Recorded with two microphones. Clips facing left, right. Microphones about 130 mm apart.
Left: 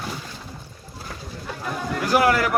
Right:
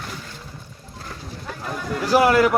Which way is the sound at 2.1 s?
25° right (ahead or behind).